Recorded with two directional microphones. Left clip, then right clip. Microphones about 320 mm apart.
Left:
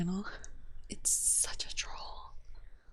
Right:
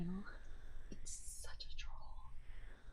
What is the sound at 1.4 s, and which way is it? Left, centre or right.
Speech, left.